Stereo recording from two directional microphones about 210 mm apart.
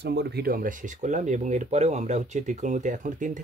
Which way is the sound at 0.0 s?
50° right (ahead or behind).